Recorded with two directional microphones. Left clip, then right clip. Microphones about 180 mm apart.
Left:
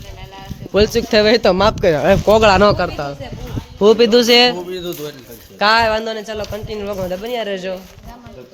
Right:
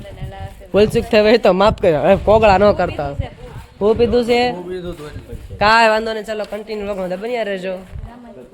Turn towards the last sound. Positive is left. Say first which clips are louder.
# right 1 dB
turn(degrees=0)  # may be behind; listen again after turning